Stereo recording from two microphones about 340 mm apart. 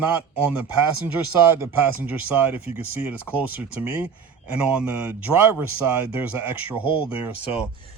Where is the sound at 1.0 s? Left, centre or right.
Centre.